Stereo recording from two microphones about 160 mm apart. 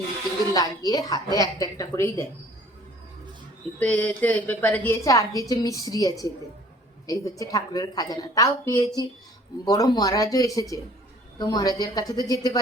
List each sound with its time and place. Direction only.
0.5 s a woman's voice: 25° left (ahead or behind)
3.8 s a woman's voice: 10° left (ahead or behind)